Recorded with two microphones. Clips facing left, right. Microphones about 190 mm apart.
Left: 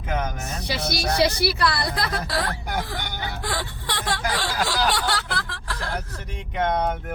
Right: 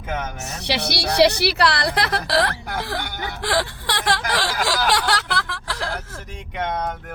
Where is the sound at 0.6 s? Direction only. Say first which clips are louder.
Right 3 dB; 75° right (ahead or behind).